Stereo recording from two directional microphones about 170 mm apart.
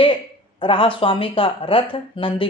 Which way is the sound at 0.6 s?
30° left (ahead or behind).